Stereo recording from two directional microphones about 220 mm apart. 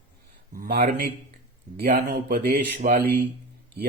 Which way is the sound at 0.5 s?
40° right (ahead or behind).